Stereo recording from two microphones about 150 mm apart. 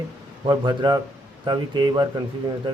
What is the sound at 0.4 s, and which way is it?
Speech, 30° right (ahead or behind).